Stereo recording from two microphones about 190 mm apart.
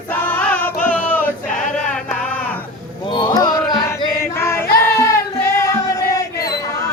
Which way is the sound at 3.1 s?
20° left (ahead or behind).